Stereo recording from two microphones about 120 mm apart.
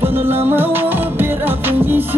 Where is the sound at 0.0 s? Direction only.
20° right (ahead or behind).